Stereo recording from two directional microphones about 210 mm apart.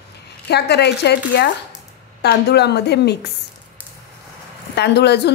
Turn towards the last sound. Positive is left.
turn(degrees=50)  # may be behind; listen again after turning